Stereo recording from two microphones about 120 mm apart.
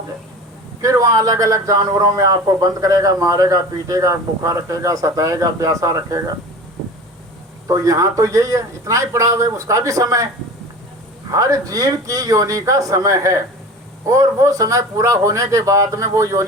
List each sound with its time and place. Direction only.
0.8 s a man's voice: 25° right (ahead or behind)
7.7 s a man's voice: 30° right (ahead or behind)
11.3 s a man's voice: 30° right (ahead or behind)